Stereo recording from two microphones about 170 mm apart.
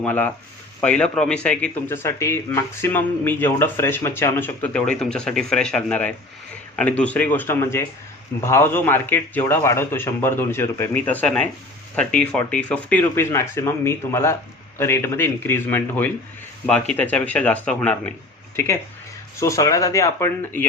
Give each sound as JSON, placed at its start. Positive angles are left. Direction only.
{"t": 0.0, "sound": "speech", "side_deg": 10}